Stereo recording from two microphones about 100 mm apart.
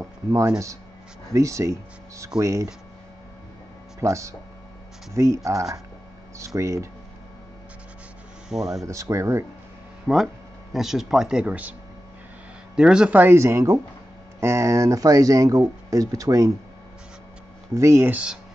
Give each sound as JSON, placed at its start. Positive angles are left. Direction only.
{"t": 0.0, "sound": "a sound", "side_deg": -35}
{"t": 1.3, "sound": "speech", "side_deg": -30}
{"t": 4.0, "sound": "speech", "side_deg": -30}
{"t": 8.5, "sound": "speech", "side_deg": -5}
{"t": 8.8, "sound": "speech", "side_deg": -30}
{"t": 10.0, "sound": "speech", "side_deg": 0}
{"t": 12.7, "sound": "speech", "side_deg": -10}
{"t": 13.2, "sound": "speech", "side_deg": -25}
{"t": 17.7, "sound": "speech", "side_deg": -30}
{"t": 18.1, "sound": "speech", "side_deg": -10}